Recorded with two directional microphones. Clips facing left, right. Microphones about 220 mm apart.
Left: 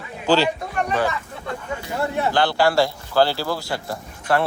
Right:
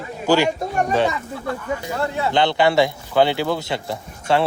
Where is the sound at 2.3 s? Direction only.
20° right (ahead or behind).